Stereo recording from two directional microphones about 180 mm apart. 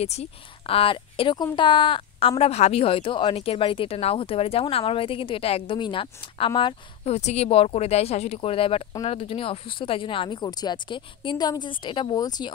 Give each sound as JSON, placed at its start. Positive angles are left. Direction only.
{"t": 0.0, "sound": "speech", "side_deg": 35}